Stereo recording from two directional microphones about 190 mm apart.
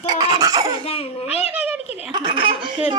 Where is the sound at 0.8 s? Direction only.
30° left (ahead or behind).